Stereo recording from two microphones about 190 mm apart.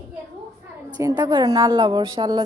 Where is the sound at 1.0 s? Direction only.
15° right (ahead or behind).